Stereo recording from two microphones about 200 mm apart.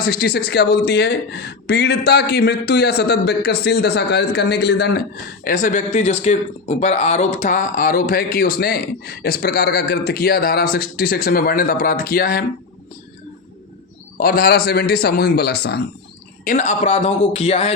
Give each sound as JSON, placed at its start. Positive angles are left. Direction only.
{"t": 0.0, "sound": "speech", "side_deg": 50}
{"t": 5.5, "sound": "speech", "side_deg": 40}
{"t": 14.2, "sound": "speech", "side_deg": 50}
{"t": 16.4, "sound": "speech", "side_deg": 40}